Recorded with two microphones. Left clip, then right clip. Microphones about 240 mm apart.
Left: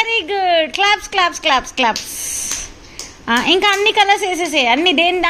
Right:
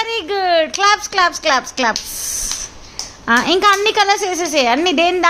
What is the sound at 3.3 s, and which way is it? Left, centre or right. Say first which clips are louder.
A woman's voice: right 1 dB; centre.